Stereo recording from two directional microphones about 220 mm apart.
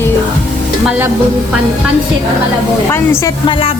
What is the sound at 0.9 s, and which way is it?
Speech, 10° right (ahead or behind).